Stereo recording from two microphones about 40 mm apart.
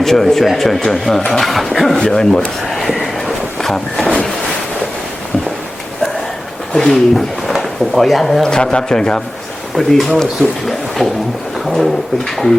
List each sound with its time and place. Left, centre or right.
0.0 s a man's voice: centre
2.0 s a man's voice: centre
3.2 s a sound: centre
6.7 s a man's voice: centre
7.4 s speech: centre
8.4 s a man's voice: centre
9.7 s speech: centre
10.7 s a sound: centre
11.6 s speech: centre